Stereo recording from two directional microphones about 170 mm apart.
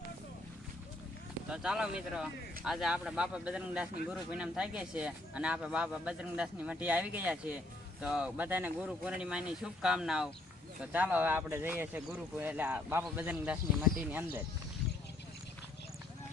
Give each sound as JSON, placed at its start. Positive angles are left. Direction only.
{"t": 1.5, "sound": "speech", "side_deg": -5}